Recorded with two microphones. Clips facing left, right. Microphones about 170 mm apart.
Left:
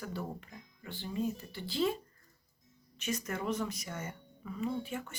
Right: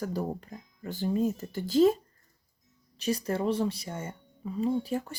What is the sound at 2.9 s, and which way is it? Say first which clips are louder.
Speech: right 7 dB; 35° right (ahead or behind).